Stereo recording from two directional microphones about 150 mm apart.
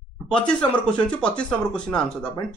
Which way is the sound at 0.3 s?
5° left (ahead or behind).